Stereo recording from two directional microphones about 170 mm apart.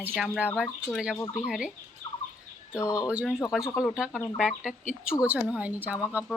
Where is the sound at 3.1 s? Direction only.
5° right (ahead or behind).